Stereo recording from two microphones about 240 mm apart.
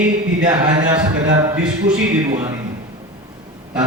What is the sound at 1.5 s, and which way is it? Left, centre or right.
Speech, centre.